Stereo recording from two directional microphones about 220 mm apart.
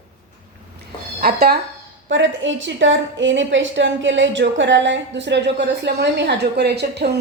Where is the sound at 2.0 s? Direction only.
55° right (ahead or behind).